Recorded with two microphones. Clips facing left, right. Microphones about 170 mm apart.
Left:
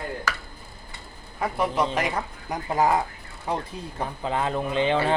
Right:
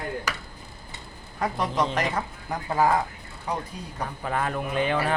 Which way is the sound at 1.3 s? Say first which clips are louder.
Left 1 dB; 10° left (ahead or behind).